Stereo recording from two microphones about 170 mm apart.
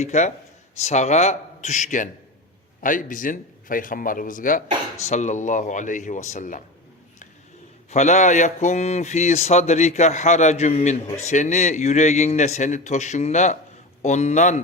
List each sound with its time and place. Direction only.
0.0 s speech: 40° left (ahead or behind)
7.9 s speech: 45° left (ahead or behind)